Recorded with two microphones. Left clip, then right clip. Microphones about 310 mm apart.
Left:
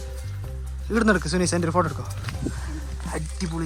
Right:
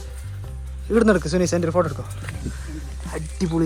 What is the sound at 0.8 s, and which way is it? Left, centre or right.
Speech, centre.